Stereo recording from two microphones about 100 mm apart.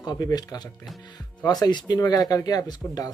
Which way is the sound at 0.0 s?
45° left (ahead or behind).